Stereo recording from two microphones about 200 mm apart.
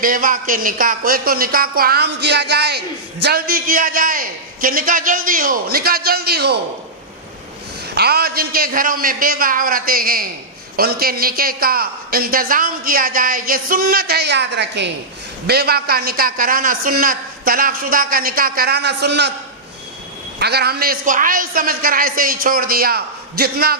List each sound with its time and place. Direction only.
0.0 s speech: 45° right (ahead or behind)
7.9 s speech: 50° right (ahead or behind)
20.4 s speech: 55° right (ahead or behind)